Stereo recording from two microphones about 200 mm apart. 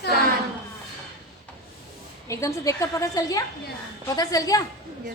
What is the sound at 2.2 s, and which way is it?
A woman's voice, 15° left (ahead or behind).